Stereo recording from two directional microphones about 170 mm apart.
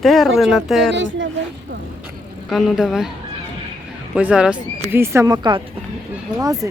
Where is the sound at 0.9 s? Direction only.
90° right.